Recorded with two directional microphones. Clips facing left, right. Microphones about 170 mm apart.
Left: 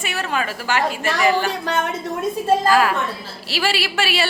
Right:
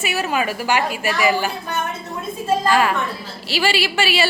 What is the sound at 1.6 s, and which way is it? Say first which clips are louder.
Speech: left 3 dB; 90° left.